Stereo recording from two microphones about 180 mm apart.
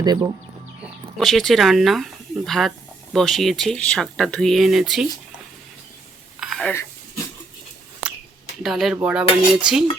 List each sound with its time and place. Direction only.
0.0 s speech: 20° right (ahead or behind)
1.2 s speech: centre (ahead or behind)
6.4 s a sound: centre (ahead or behind)
8.6 s speech: centre (ahead or behind)